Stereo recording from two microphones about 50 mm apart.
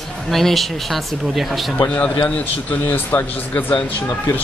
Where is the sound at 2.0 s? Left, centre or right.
Left.